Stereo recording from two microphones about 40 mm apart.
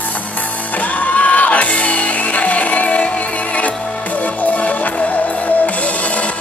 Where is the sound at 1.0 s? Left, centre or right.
Left.